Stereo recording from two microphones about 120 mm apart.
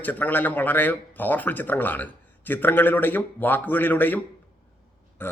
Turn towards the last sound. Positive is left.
turn(degrees=20)  # may be behind; listen again after turning